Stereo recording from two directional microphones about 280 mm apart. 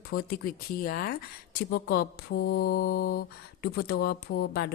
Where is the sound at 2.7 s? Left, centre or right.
Left.